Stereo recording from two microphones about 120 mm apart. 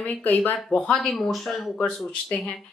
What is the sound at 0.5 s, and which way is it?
A woman's voice, 5° left (ahead or behind).